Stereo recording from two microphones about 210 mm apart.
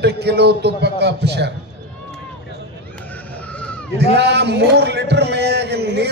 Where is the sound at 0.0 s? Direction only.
50° right (ahead or behind).